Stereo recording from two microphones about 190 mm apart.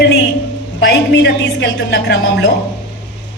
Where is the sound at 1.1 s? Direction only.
65° left (ahead or behind).